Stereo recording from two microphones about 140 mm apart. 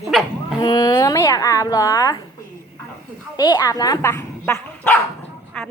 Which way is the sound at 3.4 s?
30° left (ahead or behind).